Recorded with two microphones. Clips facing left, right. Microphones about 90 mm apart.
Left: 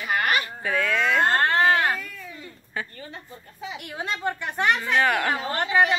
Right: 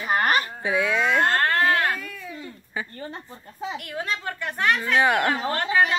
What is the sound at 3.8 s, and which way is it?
A woman's voice, 20° left (ahead or behind).